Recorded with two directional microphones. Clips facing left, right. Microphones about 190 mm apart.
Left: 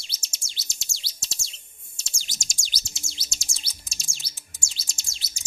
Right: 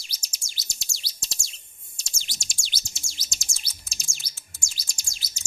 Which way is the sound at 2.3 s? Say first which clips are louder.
Left 1 dB; 45° left (ahead or behind).